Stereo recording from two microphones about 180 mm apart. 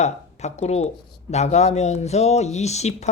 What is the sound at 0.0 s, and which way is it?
Speech, 40° left (ahead or behind).